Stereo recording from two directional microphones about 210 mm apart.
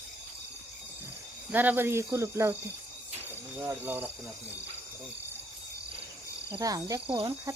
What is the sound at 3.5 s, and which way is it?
Speech, 10° right (ahead or behind).